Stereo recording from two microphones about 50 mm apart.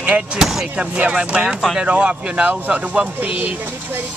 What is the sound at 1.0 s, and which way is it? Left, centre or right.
Speech, right.